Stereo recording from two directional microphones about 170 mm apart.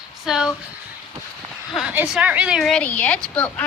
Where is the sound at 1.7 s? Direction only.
10° right (ahead or behind); by 3.6 s 10° left (ahead or behind).